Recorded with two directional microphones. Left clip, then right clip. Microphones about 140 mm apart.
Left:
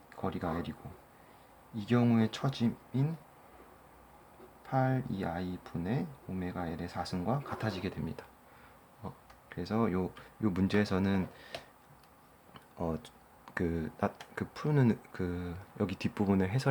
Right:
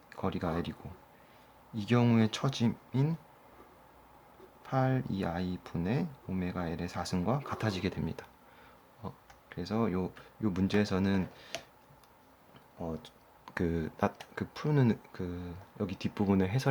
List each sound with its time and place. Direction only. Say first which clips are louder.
0.1 s speech: right 2 dB; 25° right (ahead or behind)
1.7 s speech: right 1 dB; 30° right (ahead or behind)
4.6 s speech: even; 25° right (ahead or behind)
9.0 s speech: right 1 dB; 5° right (ahead or behind)
13.4 s speech: right 1 dB; 10° right (ahead or behind)
15.1 s speech: left 3 dB; 10° left (ahead or behind); by 16.6 s 10° right (ahead or behind)